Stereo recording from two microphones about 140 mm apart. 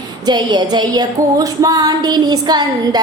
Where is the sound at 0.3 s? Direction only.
30° right (ahead or behind).